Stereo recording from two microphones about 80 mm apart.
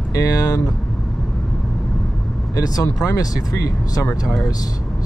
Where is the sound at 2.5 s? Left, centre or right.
Left.